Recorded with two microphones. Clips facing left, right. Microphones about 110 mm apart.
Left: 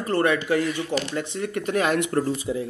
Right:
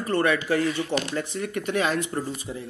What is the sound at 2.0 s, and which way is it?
Speech, 80° left.